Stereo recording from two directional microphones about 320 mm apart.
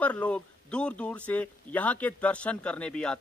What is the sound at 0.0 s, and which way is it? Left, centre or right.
Speech, centre.